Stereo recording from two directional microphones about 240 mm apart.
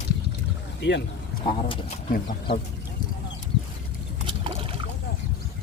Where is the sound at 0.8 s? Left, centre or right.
Left.